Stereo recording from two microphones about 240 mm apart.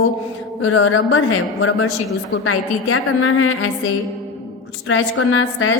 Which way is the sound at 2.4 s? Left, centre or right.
Left.